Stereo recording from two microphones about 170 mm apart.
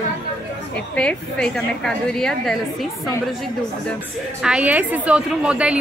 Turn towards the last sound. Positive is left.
turn(degrees=-5)  # may be behind; listen again after turning